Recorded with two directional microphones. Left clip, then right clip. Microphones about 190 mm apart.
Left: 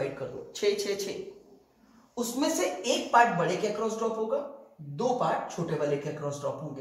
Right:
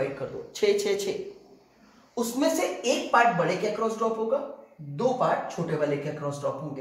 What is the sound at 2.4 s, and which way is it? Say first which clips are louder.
Speech: right 3 dB; 15° right (ahead or behind).